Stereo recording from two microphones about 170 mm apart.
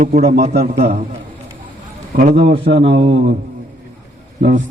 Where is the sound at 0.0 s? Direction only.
45° right (ahead or behind).